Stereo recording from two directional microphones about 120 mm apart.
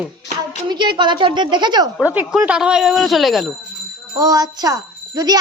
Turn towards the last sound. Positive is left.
turn(degrees=-35)  # may be behind; listen again after turning